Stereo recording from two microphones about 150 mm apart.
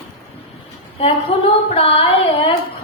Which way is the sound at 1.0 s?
40° left (ahead or behind).